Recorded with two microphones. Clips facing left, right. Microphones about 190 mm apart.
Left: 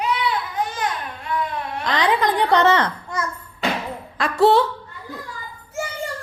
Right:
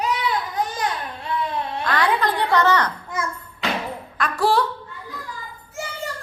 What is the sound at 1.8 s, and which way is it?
A woman's voice, 20° left (ahead or behind).